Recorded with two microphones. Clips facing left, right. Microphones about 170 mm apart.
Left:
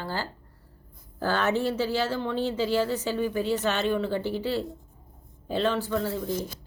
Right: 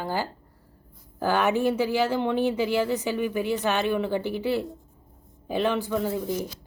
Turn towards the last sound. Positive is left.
turn(degrees=-15)  # may be behind; listen again after turning